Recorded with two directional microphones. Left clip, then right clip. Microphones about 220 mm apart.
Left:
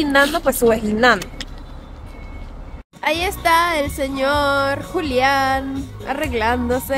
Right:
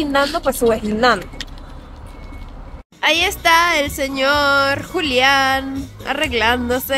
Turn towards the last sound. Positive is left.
turn(degrees=5)  # may be behind; listen again after turning